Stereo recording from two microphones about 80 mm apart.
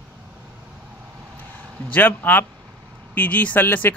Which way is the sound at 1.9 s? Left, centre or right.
Left.